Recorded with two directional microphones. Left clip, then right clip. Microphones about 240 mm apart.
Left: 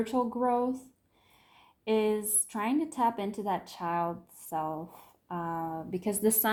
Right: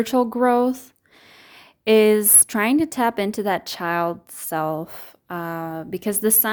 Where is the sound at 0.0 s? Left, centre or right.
Right.